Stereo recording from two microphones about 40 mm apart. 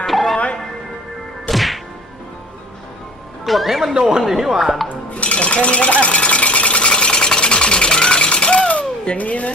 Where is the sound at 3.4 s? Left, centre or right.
Centre.